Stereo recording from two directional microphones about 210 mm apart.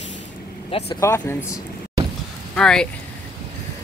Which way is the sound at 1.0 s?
10° left (ahead or behind).